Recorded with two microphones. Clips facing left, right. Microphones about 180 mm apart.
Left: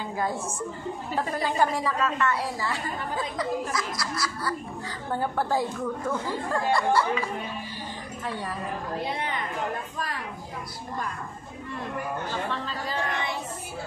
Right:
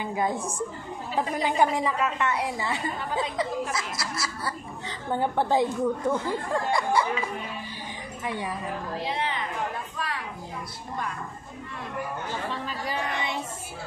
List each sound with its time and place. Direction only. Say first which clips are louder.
0.0 s a woman's voice: right 2 dB; 20° right (ahead or behind)
8.3 s speech: right 2 dB; 15° right (ahead or behind)
9.0 s a woman's voice: right 3 dB; 50° left (ahead or behind)
12.3 s speech: left 1 dB; 15° right (ahead or behind)